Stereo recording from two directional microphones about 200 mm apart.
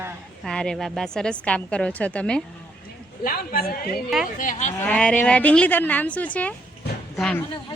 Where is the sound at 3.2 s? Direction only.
45° left (ahead or behind).